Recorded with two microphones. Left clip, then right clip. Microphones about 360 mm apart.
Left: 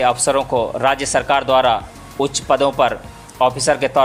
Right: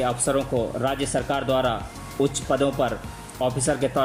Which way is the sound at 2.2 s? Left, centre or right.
Left.